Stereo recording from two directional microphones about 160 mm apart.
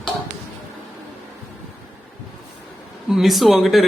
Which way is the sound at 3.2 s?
Centre (ahead or behind).